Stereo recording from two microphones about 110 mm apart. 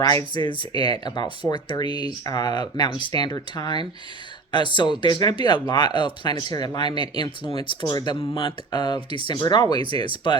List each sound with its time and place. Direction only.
0.4 s speech: 35° left (ahead or behind)